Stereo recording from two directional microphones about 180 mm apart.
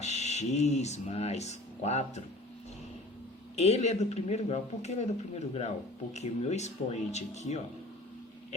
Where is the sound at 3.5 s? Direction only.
35° left (ahead or behind).